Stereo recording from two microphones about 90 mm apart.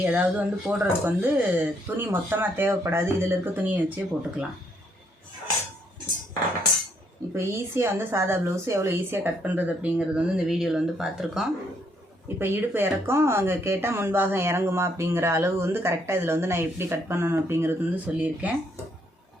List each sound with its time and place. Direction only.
0.0 s speech: 15° right (ahead or behind)
7.3 s speech: 25° right (ahead or behind); by 11.4 s 5° right (ahead or behind)
12.4 s speech: 25° right (ahead or behind)